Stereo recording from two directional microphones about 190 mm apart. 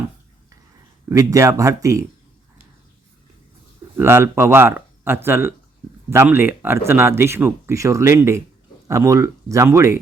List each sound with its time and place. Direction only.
1.1 s speech: 20° right (ahead or behind)
3.9 s speech: 15° right (ahead or behind)